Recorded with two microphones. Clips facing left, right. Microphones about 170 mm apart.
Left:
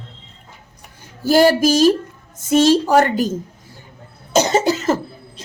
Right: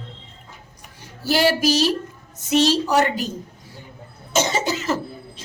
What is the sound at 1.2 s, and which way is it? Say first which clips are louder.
A woman's voice: left 6 dB; 45° left (ahead or behind).